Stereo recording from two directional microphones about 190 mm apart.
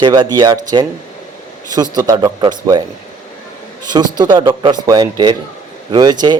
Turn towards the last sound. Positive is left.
turn(degrees=-20)  # may be behind; listen again after turning